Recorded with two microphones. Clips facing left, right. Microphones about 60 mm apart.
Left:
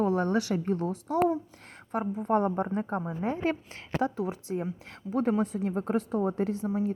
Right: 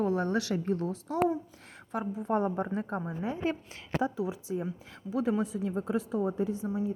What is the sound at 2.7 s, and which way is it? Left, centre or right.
A woman's voice, left.